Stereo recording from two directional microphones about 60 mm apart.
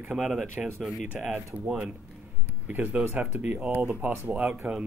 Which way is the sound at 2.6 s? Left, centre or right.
Right.